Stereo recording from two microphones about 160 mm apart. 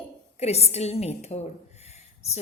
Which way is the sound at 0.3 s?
40° left (ahead or behind).